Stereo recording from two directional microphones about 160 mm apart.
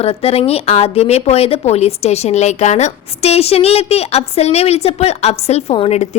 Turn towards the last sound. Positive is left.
turn(degrees=45)  # may be behind; listen again after turning